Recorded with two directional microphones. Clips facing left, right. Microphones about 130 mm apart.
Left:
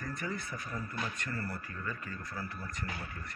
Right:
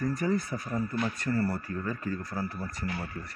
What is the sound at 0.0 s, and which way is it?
Speech, 40° right (ahead or behind).